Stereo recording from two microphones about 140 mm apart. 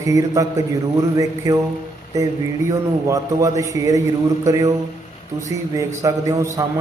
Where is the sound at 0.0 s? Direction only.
25° right (ahead or behind).